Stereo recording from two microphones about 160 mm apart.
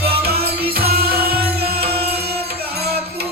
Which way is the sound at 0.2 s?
75° right (ahead or behind).